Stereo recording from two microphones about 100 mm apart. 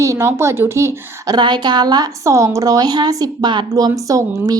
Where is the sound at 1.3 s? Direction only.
45° right (ahead or behind).